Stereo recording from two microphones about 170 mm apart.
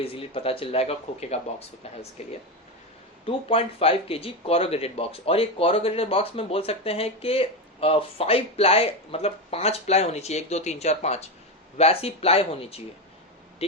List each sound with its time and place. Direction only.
0.0 s speech: 35° left (ahead or behind)
3.2 s speech: 35° left (ahead or behind)